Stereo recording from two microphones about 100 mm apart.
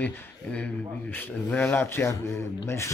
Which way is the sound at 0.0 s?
10° left (ahead or behind).